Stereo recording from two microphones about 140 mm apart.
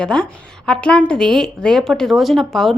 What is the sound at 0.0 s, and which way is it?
A woman's voice, 5° left (ahead or behind).